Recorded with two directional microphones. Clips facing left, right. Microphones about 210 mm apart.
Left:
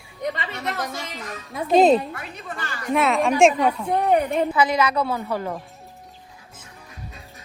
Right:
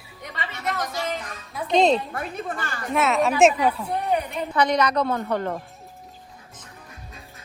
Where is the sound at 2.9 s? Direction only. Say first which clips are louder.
Left 2 dB; centre (ahead or behind).